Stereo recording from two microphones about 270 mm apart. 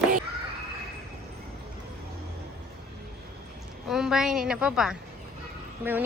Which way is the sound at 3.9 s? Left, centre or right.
Centre.